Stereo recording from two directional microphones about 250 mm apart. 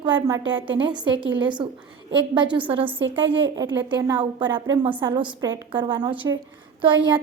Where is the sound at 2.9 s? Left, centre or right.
Right.